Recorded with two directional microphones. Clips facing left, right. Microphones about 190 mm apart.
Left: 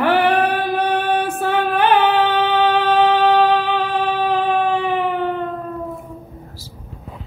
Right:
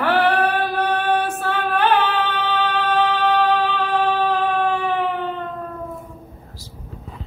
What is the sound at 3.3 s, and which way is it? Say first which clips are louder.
Music: left 3 dB; 15° left (ahead or behind).